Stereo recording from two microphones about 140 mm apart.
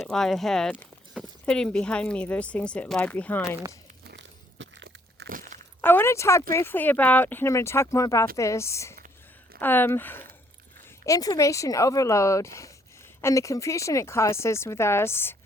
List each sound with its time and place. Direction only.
0.0 s speech: 5° left (ahead or behind)
5.3 s crunch: 75° right (ahead or behind)
5.8 s a sound: 15° left (ahead or behind)
6.5 s speech: 15° left (ahead or behind)
11.0 s speech: 25° left (ahead or behind)